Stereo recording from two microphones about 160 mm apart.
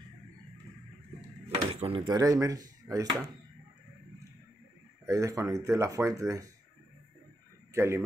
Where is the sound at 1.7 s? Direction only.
35° right (ahead or behind).